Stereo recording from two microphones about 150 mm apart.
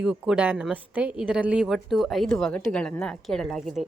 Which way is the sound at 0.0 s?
10° right (ahead or behind).